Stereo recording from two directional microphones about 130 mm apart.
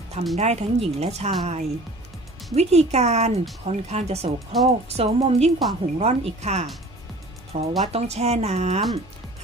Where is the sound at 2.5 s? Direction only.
55° right (ahead or behind).